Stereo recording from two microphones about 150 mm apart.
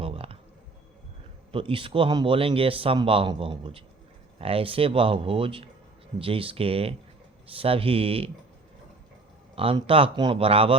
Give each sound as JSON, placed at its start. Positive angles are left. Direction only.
{"t": 0.0, "sound": "a sound", "side_deg": -40}
{"t": 1.5, "sound": "speech", "side_deg": -35}
{"t": 9.6, "sound": "speech", "side_deg": -35}